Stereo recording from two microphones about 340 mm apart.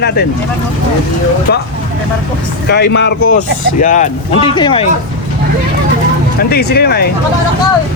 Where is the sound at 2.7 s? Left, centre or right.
Left.